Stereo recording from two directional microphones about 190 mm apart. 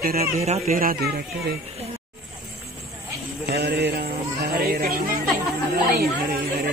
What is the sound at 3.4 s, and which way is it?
Speech, 55° right (ahead or behind).